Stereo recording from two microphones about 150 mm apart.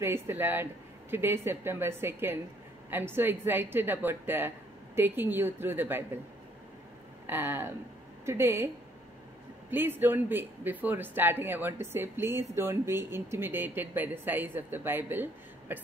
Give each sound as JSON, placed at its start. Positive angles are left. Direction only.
{"t": 0.0, "sound": "speech", "side_deg": -15}
{"t": 7.2, "sound": "speech", "side_deg": -15}
{"t": 9.7, "sound": "speech", "side_deg": -15}